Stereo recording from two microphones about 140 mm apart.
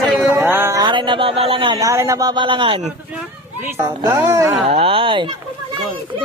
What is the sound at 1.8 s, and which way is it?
Speech, 20° right (ahead or behind).